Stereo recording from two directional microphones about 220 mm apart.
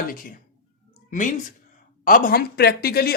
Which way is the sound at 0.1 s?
40° left (ahead or behind).